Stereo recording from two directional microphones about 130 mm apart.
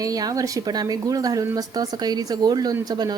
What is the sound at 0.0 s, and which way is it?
A woman's voice, 25° right (ahead or behind).